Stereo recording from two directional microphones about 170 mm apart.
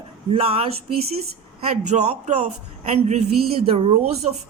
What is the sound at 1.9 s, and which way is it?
A woman's voice, 40° right (ahead or behind).